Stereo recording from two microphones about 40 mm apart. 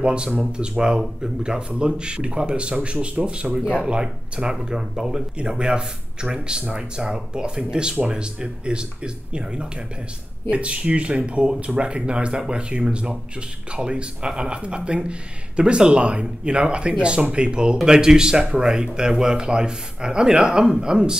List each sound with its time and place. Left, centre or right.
0.0 s speech: right